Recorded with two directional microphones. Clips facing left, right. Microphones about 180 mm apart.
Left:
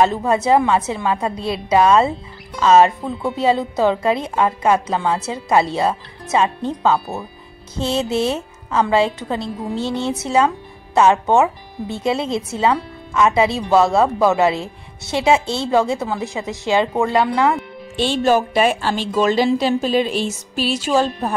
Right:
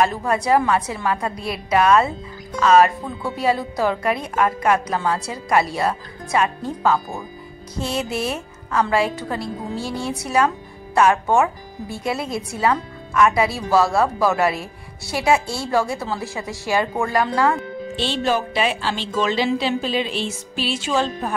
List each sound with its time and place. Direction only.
0.0 s a woman's voice: 25° left (ahead or behind)
17.9 s a woman's voice: 50° left (ahead or behind)